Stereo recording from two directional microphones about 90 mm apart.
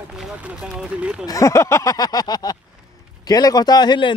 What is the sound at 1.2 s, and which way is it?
Speech, 40° left (ahead or behind).